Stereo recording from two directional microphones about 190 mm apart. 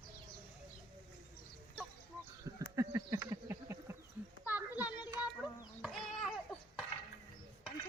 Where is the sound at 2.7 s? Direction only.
15° right (ahead or behind).